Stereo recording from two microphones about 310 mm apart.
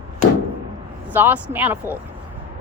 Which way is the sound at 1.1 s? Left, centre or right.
Centre.